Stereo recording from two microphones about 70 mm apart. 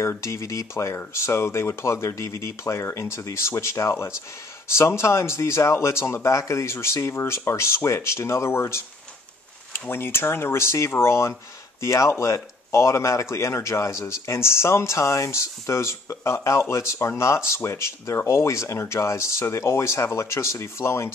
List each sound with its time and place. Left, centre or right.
0.0 s speech: left
9.8 s speech: left